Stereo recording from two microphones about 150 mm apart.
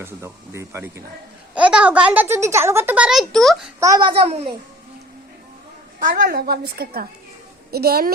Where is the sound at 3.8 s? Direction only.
25° right (ahead or behind).